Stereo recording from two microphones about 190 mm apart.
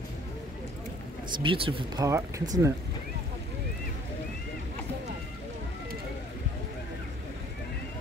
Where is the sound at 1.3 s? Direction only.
25° right (ahead or behind).